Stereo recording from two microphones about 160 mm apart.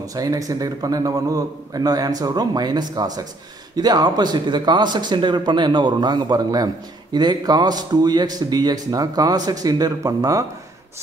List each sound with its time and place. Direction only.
0.1 s speech: 20° right (ahead or behind)